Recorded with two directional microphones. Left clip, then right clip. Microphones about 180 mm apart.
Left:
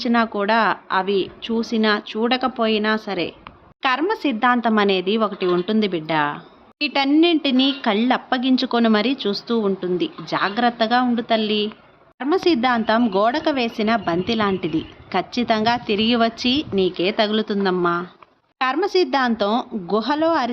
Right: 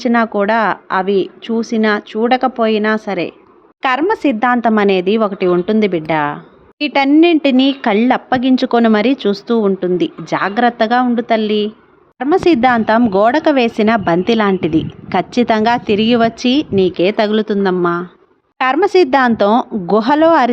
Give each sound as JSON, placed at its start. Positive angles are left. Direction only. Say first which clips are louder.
{"t": 0.0, "sound": "a woman's voice", "louder": "right 6 dB", "side_deg": -40}
{"t": 18.6, "sound": "speech", "louder": "right 8 dB", "side_deg": -50}